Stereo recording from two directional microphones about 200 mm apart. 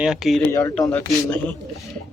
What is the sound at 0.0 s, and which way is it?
Speech, centre (ahead or behind).